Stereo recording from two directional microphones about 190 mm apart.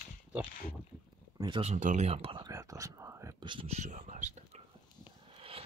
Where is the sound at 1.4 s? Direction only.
30° right (ahead or behind).